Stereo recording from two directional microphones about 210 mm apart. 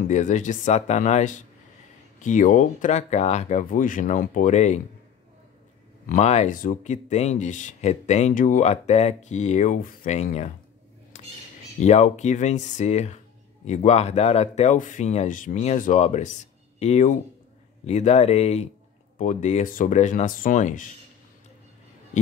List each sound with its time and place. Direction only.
0.1 s speech: 35° left (ahead or behind)
6.0 s speech: 35° left (ahead or behind)
11.1 s squawk: 35° left (ahead or behind)
11.8 s speech: 35° left (ahead or behind)